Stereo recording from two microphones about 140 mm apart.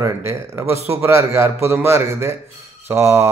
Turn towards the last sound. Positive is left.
turn(degrees=-20)  # may be behind; listen again after turning